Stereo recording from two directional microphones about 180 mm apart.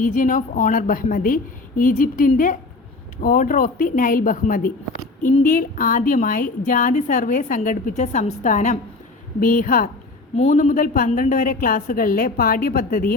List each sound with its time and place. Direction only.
0.0 s a woman's voice: 50° left (ahead or behind)